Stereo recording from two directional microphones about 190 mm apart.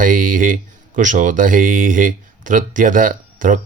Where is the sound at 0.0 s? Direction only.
45° right (ahead or behind).